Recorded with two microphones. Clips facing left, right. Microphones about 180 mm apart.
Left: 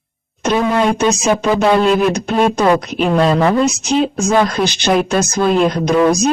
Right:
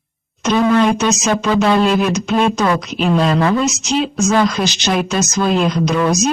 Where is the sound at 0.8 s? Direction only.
55° left (ahead or behind).